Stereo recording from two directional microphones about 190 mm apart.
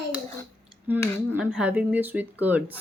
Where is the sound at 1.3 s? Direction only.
5° right (ahead or behind).